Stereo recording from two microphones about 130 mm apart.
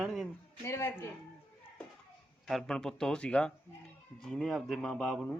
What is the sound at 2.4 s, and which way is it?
Speech, 5° left (ahead or behind).